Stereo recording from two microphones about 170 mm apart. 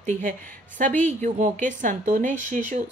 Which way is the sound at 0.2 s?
50° right (ahead or behind).